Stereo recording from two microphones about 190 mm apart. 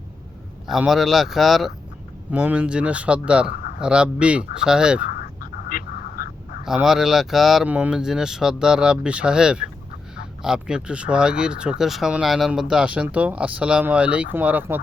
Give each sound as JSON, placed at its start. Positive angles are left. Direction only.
{"t": 0.7, "sound": "speech", "side_deg": 0}
{"t": 5.2, "sound": "a sound", "side_deg": 50}
{"t": 6.7, "sound": "speech", "side_deg": -5}